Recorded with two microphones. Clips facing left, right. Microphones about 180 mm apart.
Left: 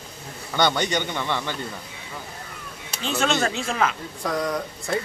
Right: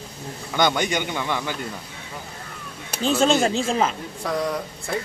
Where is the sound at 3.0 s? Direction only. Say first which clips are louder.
Right 5 dB; 35° right (ahead or behind).